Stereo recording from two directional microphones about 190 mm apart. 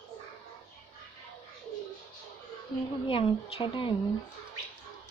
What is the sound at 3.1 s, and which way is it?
Speech, 25° left (ahead or behind).